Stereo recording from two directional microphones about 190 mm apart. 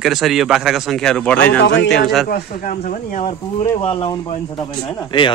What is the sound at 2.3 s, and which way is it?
Speech, 55° left (ahead or behind).